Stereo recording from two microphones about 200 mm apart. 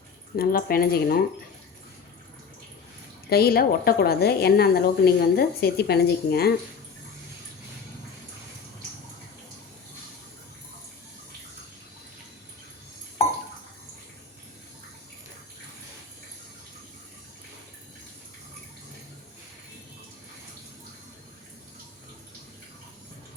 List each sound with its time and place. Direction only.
0.3 s a woman's voice: 50° left (ahead or behind)
3.2 s a woman's voice: 50° left (ahead or behind)